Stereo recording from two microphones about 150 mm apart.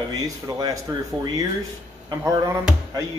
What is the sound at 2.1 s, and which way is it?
Speech, 20° right (ahead or behind).